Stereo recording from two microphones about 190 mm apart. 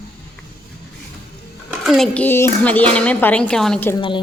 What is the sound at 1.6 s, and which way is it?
Speech, centre (ahead or behind).